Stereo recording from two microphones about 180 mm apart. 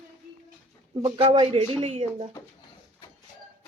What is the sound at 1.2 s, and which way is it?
Speech, 35° right (ahead or behind).